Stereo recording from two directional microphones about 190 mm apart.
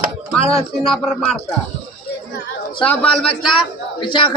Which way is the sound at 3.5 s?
25° left (ahead or behind).